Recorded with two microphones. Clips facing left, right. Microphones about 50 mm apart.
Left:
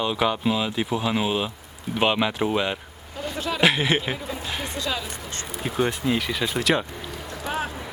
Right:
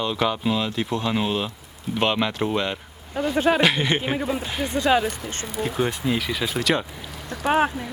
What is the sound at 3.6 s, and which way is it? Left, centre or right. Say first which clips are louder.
Speech: even; centre.